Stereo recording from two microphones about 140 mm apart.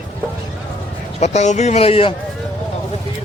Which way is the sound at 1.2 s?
55° left (ahead or behind).